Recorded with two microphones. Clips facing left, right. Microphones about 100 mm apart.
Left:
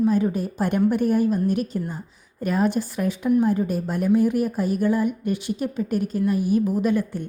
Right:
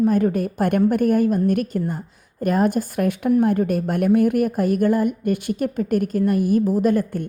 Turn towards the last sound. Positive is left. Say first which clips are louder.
# right 3 dB
turn(degrees=-50)  # may be behind; listen again after turning